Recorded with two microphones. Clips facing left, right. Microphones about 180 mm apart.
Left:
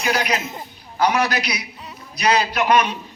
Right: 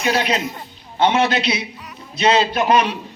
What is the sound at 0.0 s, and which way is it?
A man's voice, 30° right (ahead or behind).